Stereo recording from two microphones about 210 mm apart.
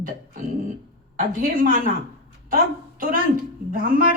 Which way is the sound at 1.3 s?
40° right (ahead or behind).